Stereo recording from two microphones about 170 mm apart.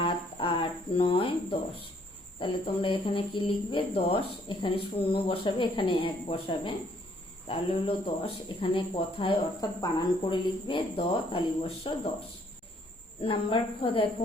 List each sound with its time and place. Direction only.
0.0 s cricket: 30° left (ahead or behind)
2.4 s speech: 30° left (ahead or behind)
13.2 s speech: 30° left (ahead or behind)